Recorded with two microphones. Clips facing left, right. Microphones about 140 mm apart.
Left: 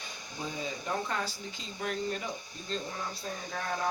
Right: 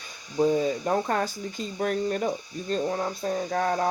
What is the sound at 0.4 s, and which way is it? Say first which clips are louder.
Speech: right 15 dB; 45° right (ahead or behind).